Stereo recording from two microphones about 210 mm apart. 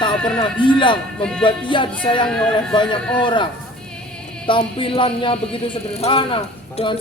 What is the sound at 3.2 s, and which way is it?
Speech, 25° left (ahead or behind).